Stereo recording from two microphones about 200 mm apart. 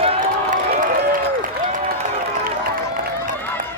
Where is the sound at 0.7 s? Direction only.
40° right (ahead or behind).